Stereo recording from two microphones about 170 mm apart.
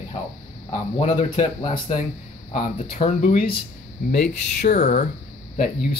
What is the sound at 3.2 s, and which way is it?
Speech, 60° left (ahead or behind).